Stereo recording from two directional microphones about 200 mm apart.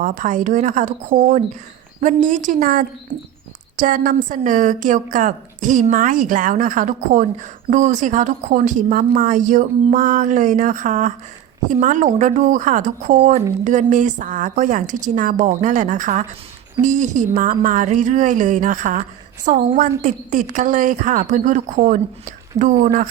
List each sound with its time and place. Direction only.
0.0 s a woman's voice: 40° right (ahead or behind)